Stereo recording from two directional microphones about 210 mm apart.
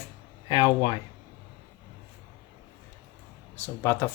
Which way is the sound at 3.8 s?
10° left (ahead or behind).